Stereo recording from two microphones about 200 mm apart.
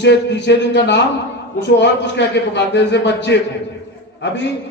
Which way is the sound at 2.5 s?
60° left (ahead or behind).